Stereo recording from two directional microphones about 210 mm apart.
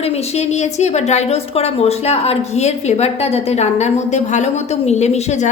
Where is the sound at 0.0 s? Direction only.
30° left (ahead or behind).